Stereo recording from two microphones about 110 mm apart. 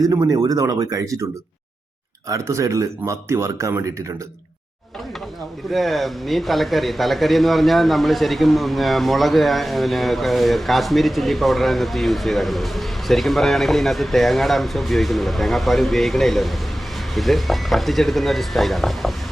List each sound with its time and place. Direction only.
0.0 s speech: 35° right (ahead or behind)
2.3 s speech: 30° right (ahead or behind)
5.7 s speech: centre (ahead or behind)